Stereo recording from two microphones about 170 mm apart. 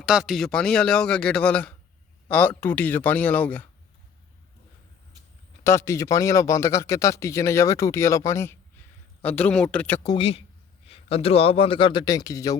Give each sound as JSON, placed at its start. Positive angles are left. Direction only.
{"t": 0.0, "sound": "speech", "side_deg": -5}
{"t": 5.6, "sound": "speech", "side_deg": 15}
{"t": 10.2, "sound": "a man's voice", "side_deg": 35}